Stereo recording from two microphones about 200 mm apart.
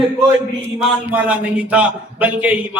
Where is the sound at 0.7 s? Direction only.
5° right (ahead or behind).